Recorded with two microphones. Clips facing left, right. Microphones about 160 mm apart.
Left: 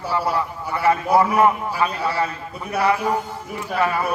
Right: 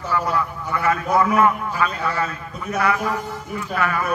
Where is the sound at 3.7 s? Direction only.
30° left (ahead or behind).